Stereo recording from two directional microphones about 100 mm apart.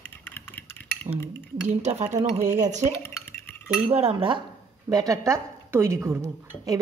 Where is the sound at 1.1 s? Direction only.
70° right (ahead or behind).